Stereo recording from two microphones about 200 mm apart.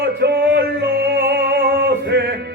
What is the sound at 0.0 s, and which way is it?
Music, 55° right (ahead or behind).